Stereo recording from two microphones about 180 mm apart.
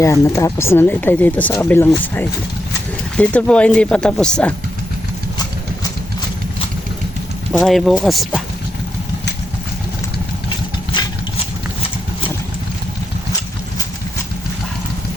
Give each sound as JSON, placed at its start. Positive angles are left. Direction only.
{"t": 0.0, "sound": "speech", "side_deg": 15}
{"t": 3.2, "sound": "speech", "side_deg": 5}
{"t": 7.5, "sound": "speech", "side_deg": 0}